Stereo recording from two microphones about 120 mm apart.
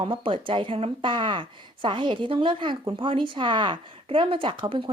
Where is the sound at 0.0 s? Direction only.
45° right (ahead or behind).